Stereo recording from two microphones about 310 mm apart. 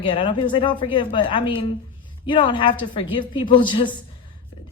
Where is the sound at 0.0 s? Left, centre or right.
Centre.